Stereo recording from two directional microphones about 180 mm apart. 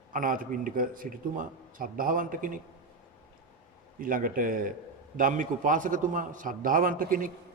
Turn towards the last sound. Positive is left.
turn(degrees=-50)  # may be behind; listen again after turning